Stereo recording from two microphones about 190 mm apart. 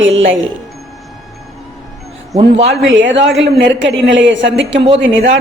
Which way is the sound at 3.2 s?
70° right (ahead or behind).